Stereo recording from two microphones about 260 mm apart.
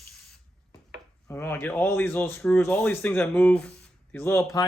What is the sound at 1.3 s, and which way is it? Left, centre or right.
Speech, centre.